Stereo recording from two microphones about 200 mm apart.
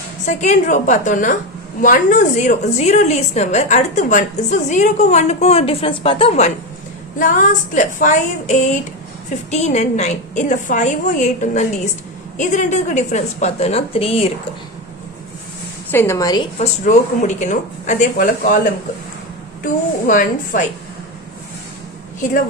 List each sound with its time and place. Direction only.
0.3 s a woman's voice: 40° left (ahead or behind)
15.9 s a woman's voice: 10° left (ahead or behind)
16.6 s a woman's voice: 35° left (ahead or behind)
20.1 s a woman's voice: 40° left (ahead or behind)